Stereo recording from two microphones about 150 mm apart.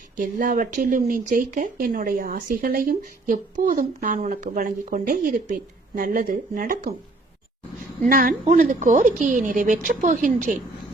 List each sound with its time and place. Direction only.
0.2 s speech: 65° right (ahead or behind)
8.0 s speech: 70° right (ahead or behind)
8.4 s speech: 55° right (ahead or behind)